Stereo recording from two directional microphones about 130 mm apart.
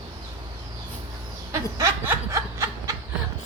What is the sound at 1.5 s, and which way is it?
Snicker, 25° right (ahead or behind).